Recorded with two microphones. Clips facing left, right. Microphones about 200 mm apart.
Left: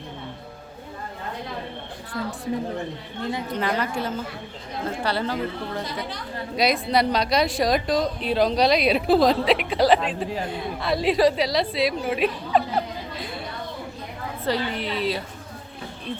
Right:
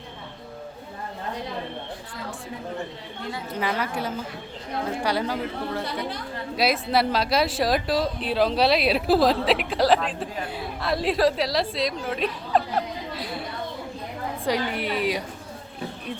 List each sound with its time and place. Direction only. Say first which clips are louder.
3.5 s a woman's voice: even; 10° right (ahead or behind)
14.4 s speech: even; 10° right (ahead or behind)